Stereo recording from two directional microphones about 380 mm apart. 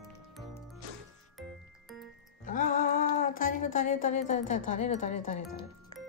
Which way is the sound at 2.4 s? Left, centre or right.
Left.